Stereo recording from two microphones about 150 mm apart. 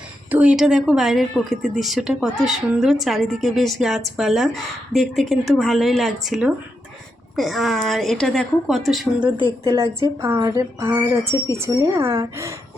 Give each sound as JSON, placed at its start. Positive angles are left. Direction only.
{"t": 0.3, "sound": "speech", "side_deg": -10}
{"t": 9.6, "sound": "a woman's voice", "side_deg": -20}